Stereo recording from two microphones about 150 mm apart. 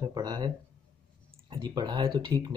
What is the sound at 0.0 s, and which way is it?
Speech, 25° right (ahead or behind).